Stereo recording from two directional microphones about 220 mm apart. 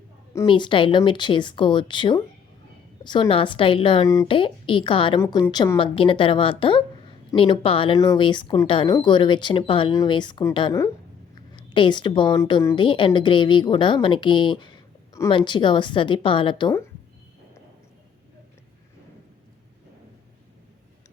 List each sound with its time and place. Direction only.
0.3 s speech: 20° left (ahead or behind)